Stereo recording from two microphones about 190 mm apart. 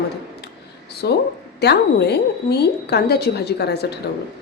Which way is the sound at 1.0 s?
60° left (ahead or behind).